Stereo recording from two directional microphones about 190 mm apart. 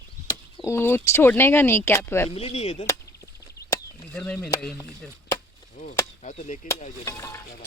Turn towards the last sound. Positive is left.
turn(degrees=15)  # may be behind; listen again after turning